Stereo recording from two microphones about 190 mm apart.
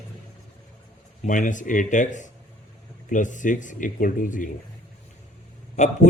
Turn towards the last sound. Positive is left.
turn(degrees=35)  # may be behind; listen again after turning